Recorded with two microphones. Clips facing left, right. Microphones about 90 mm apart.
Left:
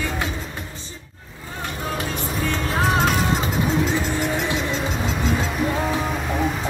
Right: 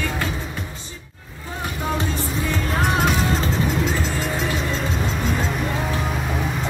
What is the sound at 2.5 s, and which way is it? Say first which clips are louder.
Music: left 1 dB; centre (ahead or behind).